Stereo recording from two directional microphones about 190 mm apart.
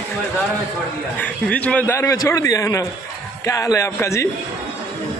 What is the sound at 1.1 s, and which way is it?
A man's voice, 5° left (ahead or behind).